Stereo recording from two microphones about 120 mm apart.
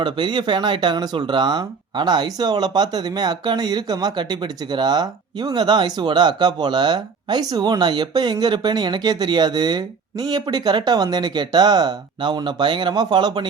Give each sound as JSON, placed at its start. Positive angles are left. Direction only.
{"t": 0.0, "sound": "speech", "side_deg": -40}